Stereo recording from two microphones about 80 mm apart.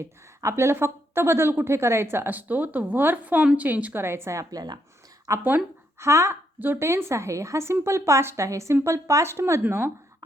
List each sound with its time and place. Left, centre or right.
0.0 s a woman's voice: right
4.0 s speech: right
5.4 s a woman's voice: right
6.0 s speech: right
6.6 s speech: right